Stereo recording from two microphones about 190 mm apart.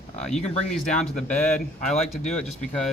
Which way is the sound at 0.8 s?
5° left (ahead or behind).